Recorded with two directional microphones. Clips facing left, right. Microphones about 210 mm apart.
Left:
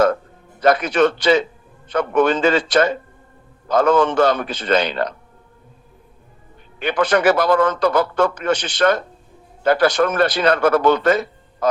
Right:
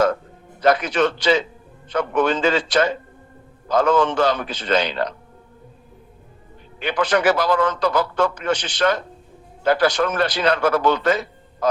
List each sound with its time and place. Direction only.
0.6 s a man's voice: 50° left (ahead or behind)
6.7 s a man's voice: 55° left (ahead or behind)